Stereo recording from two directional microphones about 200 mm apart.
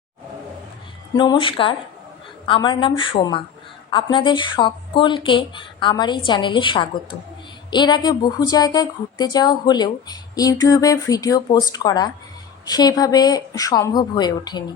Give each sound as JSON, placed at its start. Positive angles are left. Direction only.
{"t": 1.1, "sound": "a woman's voice", "side_deg": 20}